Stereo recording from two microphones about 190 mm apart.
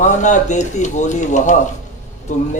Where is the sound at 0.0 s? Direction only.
40° left (ahead or behind).